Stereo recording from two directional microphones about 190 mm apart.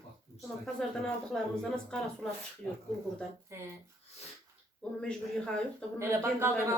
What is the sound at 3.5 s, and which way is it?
Speech, 15° right (ahead or behind).